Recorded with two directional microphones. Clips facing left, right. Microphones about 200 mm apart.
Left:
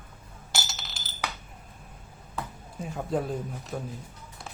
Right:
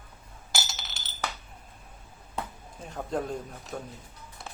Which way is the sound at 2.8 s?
5° left (ahead or behind).